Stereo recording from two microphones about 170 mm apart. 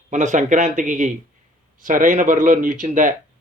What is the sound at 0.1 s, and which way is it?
Speech, 45° right (ahead or behind).